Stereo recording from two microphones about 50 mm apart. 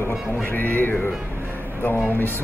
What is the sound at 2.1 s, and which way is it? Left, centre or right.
Speech, left.